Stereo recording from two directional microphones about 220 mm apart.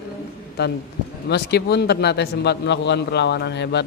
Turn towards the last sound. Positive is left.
turn(degrees=50)  # may be behind; listen again after turning